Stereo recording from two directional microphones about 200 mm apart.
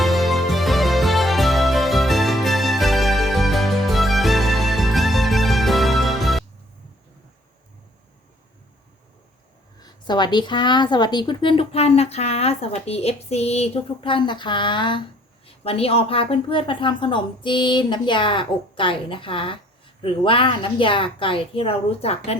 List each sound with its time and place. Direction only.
0.0 s music: centre (ahead or behind)
9.8 s a woman's voice: 20° left (ahead or behind)